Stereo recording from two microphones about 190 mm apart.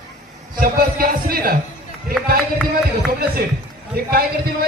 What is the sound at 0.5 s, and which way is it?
Speech, 50° right (ahead or behind).